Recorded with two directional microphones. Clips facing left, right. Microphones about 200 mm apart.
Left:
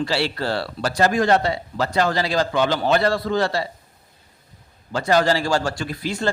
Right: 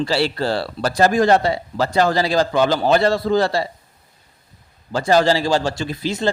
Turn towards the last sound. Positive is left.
turn(degrees=-25)  # may be behind; listen again after turning